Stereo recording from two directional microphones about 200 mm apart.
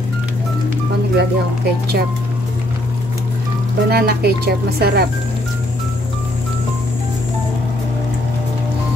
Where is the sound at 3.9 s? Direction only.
50° right (ahead or behind).